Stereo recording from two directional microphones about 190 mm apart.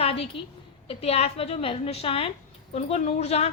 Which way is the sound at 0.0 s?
30° left (ahead or behind).